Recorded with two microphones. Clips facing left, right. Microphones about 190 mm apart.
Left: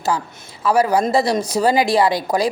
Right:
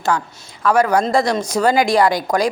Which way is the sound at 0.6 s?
10° left (ahead or behind).